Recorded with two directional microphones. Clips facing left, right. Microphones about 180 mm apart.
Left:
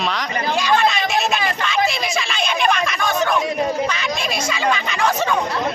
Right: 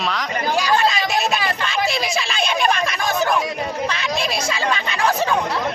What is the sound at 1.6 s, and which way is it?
Speech, 35° right (ahead or behind).